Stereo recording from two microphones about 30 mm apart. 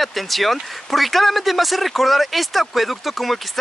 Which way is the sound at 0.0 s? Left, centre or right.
Centre.